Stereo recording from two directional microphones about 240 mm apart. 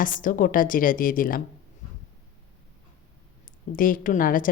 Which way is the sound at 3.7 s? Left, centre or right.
Left.